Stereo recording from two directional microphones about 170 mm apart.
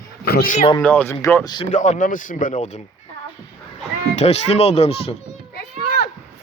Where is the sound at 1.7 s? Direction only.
45° left (ahead or behind).